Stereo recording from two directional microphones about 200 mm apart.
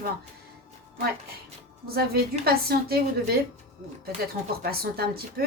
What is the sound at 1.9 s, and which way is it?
A woman's voice, 50° right (ahead or behind).